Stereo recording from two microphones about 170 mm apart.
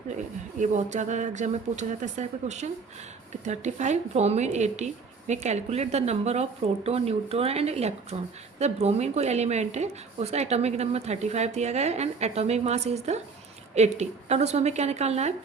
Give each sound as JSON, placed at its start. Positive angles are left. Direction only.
{"t": 0.6, "sound": "a woman's voice", "side_deg": -45}